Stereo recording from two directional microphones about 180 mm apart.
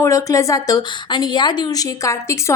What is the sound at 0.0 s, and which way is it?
A woman's voice, 15° left (ahead or behind).